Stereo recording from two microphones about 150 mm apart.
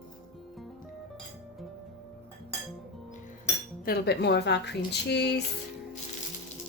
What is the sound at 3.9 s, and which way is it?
Speech, 90° left.